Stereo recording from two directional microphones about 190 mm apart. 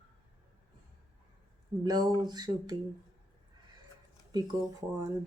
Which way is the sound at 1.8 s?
20° right (ahead or behind).